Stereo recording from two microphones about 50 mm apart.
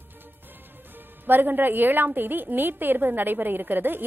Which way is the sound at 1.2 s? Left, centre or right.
Right.